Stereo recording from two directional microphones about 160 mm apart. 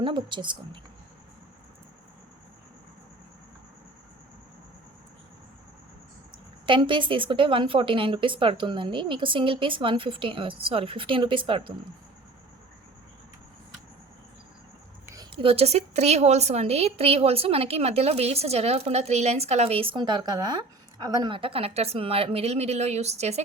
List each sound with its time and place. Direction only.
0.0 s a woman's voice: 30° right (ahead or behind)
6.7 s a woman's voice: 30° right (ahead or behind)
15.0 s a sound: 20° right (ahead or behind)
15.4 s a woman's voice: 35° right (ahead or behind)